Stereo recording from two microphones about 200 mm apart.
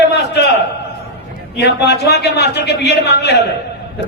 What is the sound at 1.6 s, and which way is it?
A man's voice, 55° left (ahead or behind).